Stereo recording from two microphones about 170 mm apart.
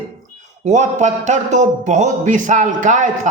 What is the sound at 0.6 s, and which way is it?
A man's voice, 45° right (ahead or behind).